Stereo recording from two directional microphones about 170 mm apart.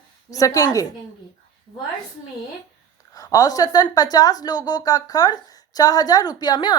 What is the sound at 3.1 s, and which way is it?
A woman's voice, 20° left (ahead or behind).